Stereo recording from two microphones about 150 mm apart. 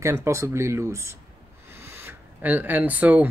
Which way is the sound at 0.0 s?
20° right (ahead or behind).